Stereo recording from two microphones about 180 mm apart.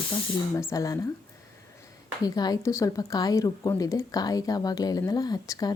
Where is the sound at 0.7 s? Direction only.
15° left (ahead or behind).